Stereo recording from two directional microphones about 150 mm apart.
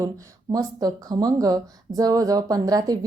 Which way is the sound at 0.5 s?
25° right (ahead or behind).